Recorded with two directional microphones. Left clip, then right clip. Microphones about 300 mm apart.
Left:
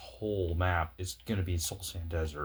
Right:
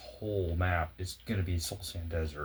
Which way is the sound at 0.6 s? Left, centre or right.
Left.